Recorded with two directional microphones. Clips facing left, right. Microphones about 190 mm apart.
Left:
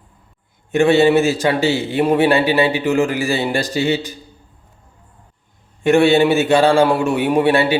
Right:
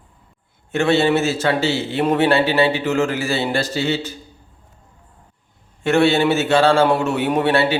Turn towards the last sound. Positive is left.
turn(degrees=15)  # may be behind; listen again after turning